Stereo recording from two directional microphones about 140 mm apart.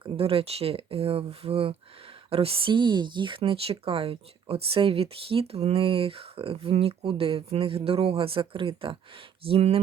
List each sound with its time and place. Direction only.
0.0 s speech: 40° right (ahead or behind)